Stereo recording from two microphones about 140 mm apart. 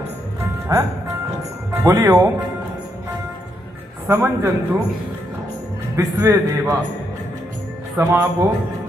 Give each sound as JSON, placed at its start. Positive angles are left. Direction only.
{"t": 0.7, "sound": "a man's voice", "side_deg": -25}
{"t": 1.9, "sound": "a man's voice", "side_deg": -20}
{"t": 4.1, "sound": "a man's voice", "side_deg": -20}
{"t": 5.9, "sound": "a man's voice", "side_deg": -15}
{"t": 8.0, "sound": "a man's voice", "side_deg": -25}